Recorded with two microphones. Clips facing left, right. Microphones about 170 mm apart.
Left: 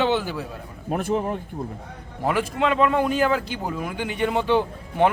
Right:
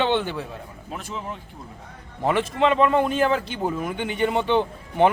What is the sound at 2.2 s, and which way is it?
A man's voice, 5° left (ahead or behind).